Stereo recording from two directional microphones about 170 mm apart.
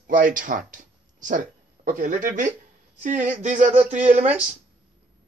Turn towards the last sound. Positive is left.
turn(degrees=-40)  # may be behind; listen again after turning